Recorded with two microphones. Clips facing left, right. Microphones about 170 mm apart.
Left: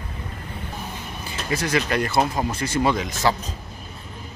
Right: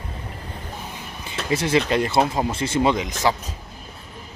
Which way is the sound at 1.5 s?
25° right (ahead or behind).